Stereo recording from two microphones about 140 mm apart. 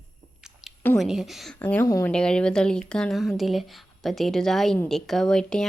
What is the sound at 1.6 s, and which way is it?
Speech, 10° left (ahead or behind).